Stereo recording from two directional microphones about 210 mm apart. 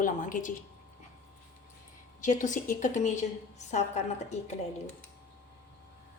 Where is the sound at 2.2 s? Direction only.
35° left (ahead or behind).